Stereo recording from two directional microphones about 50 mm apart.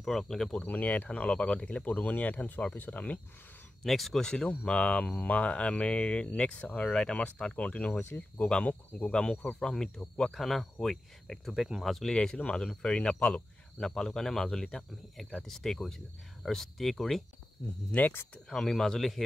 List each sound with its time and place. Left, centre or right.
0.0 s speech: centre
0.6 s speech: left
3.8 s speech: centre
4.3 s speech: centre
12.1 s speech: centre
18.3 s speech: centre